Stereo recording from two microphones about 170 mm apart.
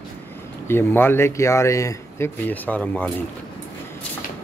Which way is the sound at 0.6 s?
15° left (ahead or behind).